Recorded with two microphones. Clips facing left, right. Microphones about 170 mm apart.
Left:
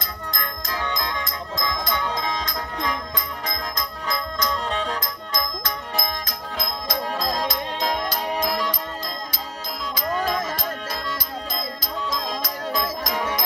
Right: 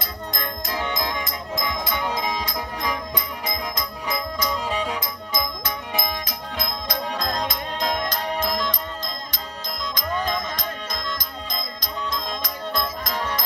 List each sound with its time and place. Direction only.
0.3 s music: 20° right (ahead or behind)
4.1 s music: 10° right (ahead or behind); by 13.4 s 5° left (ahead or behind)